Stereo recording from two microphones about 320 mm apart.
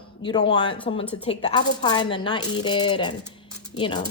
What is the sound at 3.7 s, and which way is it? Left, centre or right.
Speech, left.